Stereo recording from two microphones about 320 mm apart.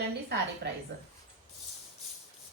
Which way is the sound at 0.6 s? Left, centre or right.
Right.